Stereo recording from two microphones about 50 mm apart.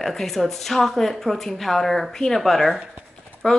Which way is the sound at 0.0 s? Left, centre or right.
Centre.